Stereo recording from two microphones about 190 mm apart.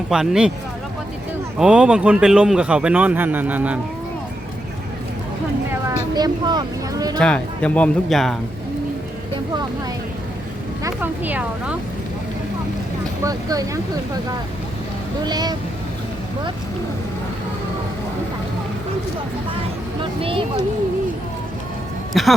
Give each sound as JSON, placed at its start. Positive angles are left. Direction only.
{"t": 0.1, "sound": "a man's voice", "side_deg": -5}
{"t": 1.5, "sound": "a man's voice", "side_deg": -5}
{"t": 6.1, "sound": "speech", "side_deg": -20}
{"t": 7.2, "sound": "a man's voice", "side_deg": 5}
{"t": 10.8, "sound": "speech", "side_deg": -10}
{"t": 13.2, "sound": "speech", "side_deg": -20}
{"t": 15.2, "sound": "speech", "side_deg": -20}
{"t": 20.0, "sound": "vehicle", "side_deg": -30}
{"t": 22.1, "sound": "a man's voice", "side_deg": 0}